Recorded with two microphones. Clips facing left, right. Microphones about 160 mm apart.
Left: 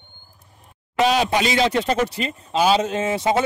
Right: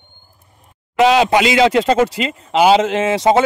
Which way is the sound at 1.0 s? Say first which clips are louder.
Right 6 dB; 90° right.